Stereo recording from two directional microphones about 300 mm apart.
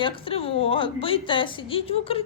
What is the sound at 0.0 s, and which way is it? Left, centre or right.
A woman's voice, centre.